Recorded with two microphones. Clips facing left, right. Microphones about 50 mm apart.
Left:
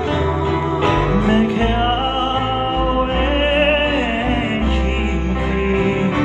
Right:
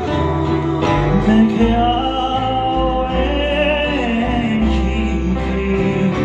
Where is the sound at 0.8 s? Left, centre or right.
Left.